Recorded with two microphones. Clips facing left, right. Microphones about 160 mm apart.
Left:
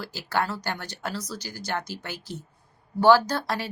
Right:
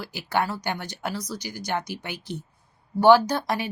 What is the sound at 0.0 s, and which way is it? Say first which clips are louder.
Speech: right 2 dB; 15° right (ahead or behind).